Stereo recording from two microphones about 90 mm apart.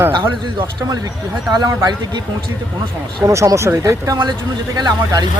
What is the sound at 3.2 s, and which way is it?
Speech, 40° right (ahead or behind).